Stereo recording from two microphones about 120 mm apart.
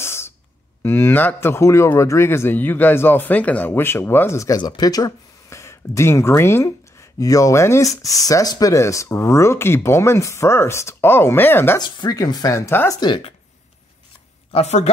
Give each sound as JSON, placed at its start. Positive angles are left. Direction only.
{"t": 0.0, "sound": "a sound", "side_deg": 20}
{"t": 0.8, "sound": "speech", "side_deg": 20}
{"t": 4.6, "sound": "speech", "side_deg": 35}
{"t": 11.8, "sound": "speech", "side_deg": 35}
{"t": 13.0, "sound": "speech", "side_deg": 40}
{"t": 14.5, "sound": "speech", "side_deg": 70}